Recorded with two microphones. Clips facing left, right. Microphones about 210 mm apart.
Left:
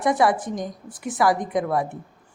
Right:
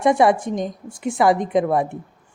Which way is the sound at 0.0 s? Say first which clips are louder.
Right 4 dB; 25° right (ahead or behind).